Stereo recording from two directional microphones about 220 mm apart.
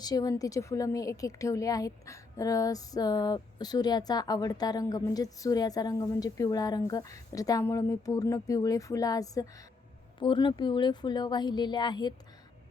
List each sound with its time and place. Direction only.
0.0 s speech: 15° left (ahead or behind)